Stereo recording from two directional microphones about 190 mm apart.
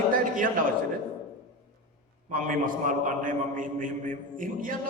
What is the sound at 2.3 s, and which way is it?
A man's voice, 45° right (ahead or behind).